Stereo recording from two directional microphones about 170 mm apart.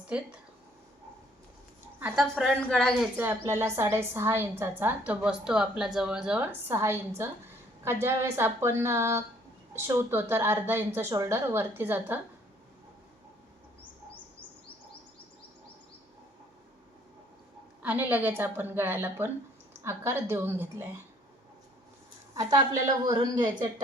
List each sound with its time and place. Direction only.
0.1 s a woman's voice: 10° right (ahead or behind)
2.0 s a woman's voice: 10° right (ahead or behind)
2.2 s a woman's voice: 5° left (ahead or behind)
3.2 s a woman's voice: 15° right (ahead or behind)
8.0 s a woman's voice: 15° right (ahead or behind)
17.8 s a woman's voice: 10° right (ahead or behind)
22.4 s a woman's voice: 25° right (ahead or behind)